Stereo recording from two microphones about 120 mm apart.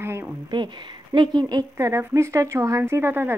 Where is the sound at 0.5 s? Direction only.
40° right (ahead or behind).